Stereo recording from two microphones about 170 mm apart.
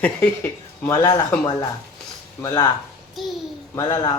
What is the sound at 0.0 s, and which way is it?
Speech, 10° left (ahead or behind).